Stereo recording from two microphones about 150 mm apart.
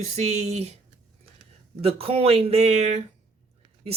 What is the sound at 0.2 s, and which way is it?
Speech, 45° right (ahead or behind).